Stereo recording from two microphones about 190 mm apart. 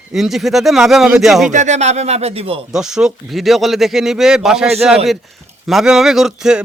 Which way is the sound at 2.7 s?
5° right (ahead or behind).